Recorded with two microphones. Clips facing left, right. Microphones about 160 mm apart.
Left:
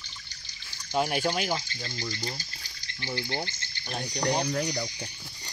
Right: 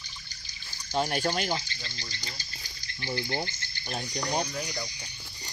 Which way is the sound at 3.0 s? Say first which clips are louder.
Right 1 dB; 5° right (ahead or behind).